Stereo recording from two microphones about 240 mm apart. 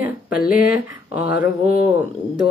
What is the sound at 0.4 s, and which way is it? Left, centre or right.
Speech, left.